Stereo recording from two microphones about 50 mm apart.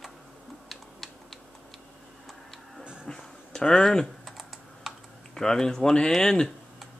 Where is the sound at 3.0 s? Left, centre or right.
Centre.